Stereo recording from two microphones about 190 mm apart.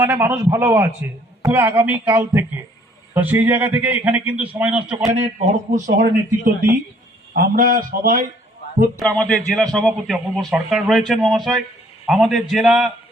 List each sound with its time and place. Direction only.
0.0 s a man's voice: 10° right (ahead or behind)
5.1 s a man's voice: 35° right (ahead or behind)
9.0 s a man's voice: 5° left (ahead or behind)